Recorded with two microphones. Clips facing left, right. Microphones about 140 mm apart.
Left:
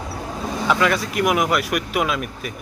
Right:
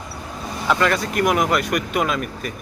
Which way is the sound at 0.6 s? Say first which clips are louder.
Even; centre (ahead or behind).